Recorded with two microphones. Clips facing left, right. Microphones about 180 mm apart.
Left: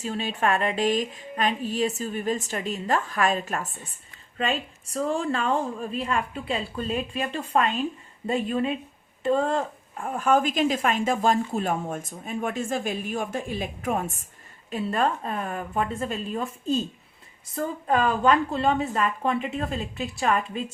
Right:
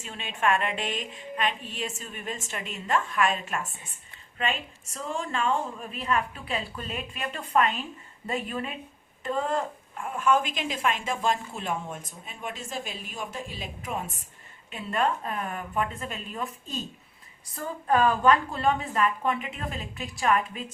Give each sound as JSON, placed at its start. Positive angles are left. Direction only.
{"t": 0.0, "sound": "a woman's voice", "side_deg": 35}
{"t": 10.2, "sound": "speech", "side_deg": 40}
{"t": 14.7, "sound": "a woman's voice", "side_deg": 35}
{"t": 18.6, "sound": "a woman's voice", "side_deg": 30}